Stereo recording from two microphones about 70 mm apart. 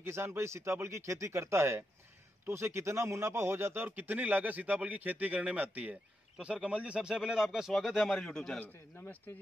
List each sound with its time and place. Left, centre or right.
0.0 s a man's voice: right; by 8.5 s centre
8.5 s speech: left